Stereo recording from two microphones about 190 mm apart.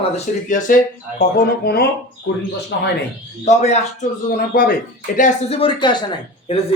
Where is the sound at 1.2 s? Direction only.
55° left (ahead or behind).